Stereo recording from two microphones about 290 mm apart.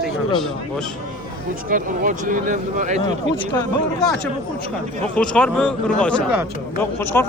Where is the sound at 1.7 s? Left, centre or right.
Right.